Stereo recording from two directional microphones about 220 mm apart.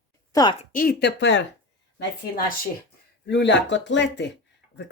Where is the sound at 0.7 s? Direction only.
45° left (ahead or behind).